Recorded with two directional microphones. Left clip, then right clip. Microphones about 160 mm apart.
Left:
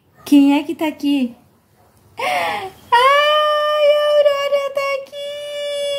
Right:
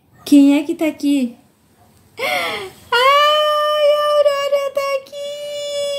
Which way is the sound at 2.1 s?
10° left (ahead or behind).